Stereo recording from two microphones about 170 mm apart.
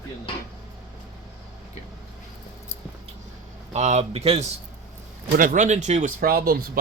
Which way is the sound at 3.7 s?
40° right (ahead or behind).